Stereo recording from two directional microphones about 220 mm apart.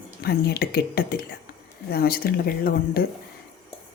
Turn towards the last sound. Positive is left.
turn(degrees=45)  # may be behind; listen again after turning